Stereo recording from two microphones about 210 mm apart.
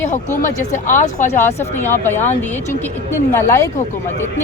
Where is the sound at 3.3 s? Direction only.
15° left (ahead or behind).